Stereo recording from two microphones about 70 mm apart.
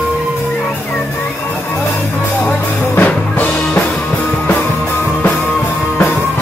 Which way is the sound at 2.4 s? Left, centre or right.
Left.